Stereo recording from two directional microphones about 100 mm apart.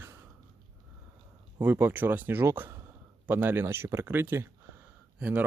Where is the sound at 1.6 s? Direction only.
20° right (ahead or behind).